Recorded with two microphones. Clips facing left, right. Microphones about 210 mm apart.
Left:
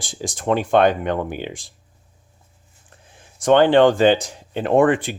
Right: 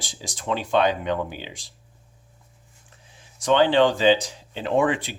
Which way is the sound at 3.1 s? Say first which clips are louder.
Left 6 dB; 50° left (ahead or behind).